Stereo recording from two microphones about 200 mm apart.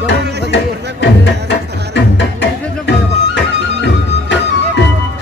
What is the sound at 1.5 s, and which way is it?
Music, 60° left (ahead or behind).